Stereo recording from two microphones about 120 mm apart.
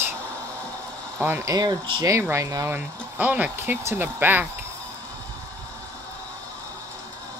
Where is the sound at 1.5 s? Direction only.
35° right (ahead or behind).